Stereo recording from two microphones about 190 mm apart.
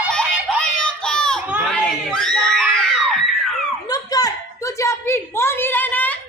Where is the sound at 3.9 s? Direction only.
20° left (ahead or behind).